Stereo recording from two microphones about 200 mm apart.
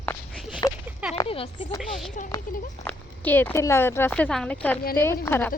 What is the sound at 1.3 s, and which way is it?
Speech, 30° left (ahead or behind).